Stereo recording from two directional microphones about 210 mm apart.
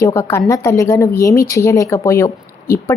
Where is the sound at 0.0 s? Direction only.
10° left (ahead or behind).